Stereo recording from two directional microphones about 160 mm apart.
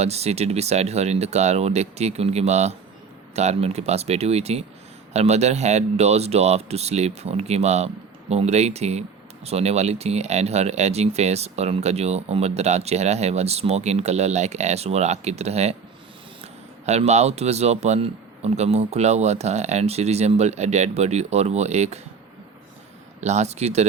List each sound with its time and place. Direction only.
0.0 s speech: 40° right (ahead or behind)
23.2 s speech: 45° right (ahead or behind)